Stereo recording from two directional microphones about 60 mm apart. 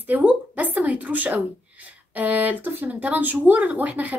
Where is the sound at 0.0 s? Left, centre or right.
Right.